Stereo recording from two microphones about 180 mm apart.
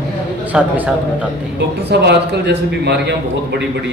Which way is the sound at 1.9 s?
70° right (ahead or behind).